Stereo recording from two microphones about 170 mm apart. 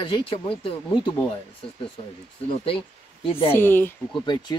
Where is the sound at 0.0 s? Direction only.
30° left (ahead or behind).